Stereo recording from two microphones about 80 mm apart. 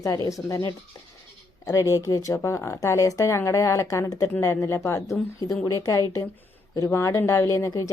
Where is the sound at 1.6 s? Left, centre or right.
Left.